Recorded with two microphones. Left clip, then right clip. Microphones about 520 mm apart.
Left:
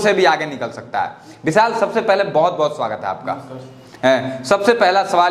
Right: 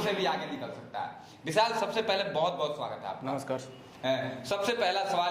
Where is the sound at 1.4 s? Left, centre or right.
Left.